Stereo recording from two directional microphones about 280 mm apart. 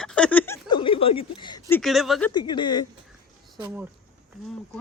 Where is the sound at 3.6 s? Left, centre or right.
Centre.